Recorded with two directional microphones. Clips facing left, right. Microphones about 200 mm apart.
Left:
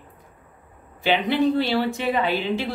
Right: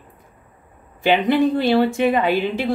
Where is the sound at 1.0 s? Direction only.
50° right (ahead or behind).